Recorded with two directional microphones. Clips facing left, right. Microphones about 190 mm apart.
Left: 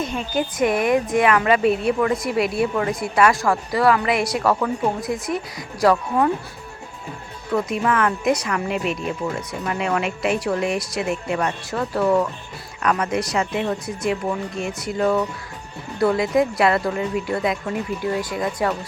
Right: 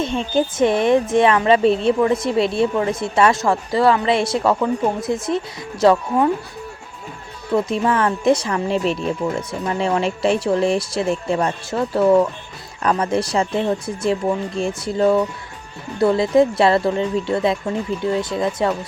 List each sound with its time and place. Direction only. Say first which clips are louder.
0.3 s speech: right 3 dB; 25° right (ahead or behind)
7.5 s speech: right 3 dB; 30° right (ahead or behind)